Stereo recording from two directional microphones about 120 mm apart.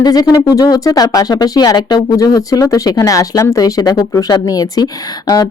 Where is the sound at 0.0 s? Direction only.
35° left (ahead or behind).